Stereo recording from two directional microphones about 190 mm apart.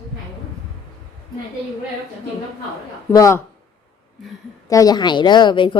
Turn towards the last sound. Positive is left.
turn(degrees=25)  # may be behind; listen again after turning